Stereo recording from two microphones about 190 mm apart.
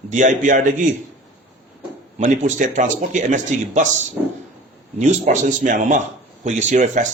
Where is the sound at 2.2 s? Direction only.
40° right (ahead or behind).